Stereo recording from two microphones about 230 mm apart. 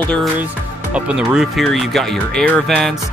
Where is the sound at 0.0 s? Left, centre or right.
Centre.